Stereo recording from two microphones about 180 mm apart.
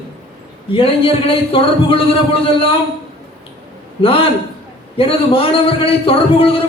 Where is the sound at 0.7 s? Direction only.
30° left (ahead or behind).